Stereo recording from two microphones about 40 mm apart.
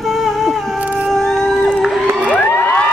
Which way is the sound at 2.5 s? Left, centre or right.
Left.